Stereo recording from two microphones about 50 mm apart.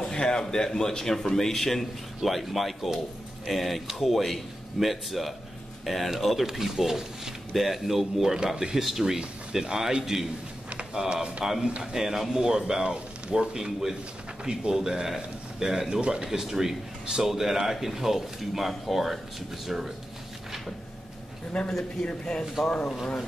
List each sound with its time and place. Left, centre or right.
0.0 s speech: centre
21.5 s speech: centre